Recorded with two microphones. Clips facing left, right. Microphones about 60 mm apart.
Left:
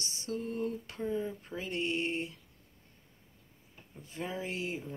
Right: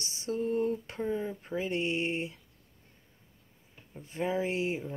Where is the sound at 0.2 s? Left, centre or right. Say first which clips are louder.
Right 6 dB; right.